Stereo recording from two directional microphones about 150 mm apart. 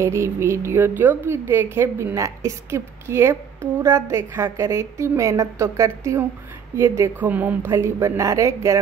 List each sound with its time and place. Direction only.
0.0 s a woman's voice: 20° right (ahead or behind)